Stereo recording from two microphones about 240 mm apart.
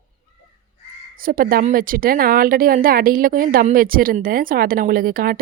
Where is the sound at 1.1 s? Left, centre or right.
Right.